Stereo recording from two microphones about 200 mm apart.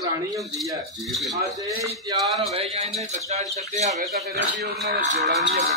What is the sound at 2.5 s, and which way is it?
Speech, 30° right (ahead or behind).